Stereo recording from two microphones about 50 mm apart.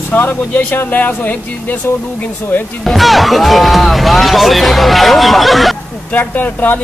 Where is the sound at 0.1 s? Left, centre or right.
Left.